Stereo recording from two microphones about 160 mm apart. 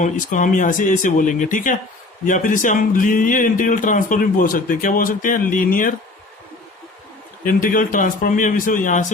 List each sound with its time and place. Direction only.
0.0 s speech: 50° left (ahead or behind)
7.4 s speech: 60° left (ahead or behind)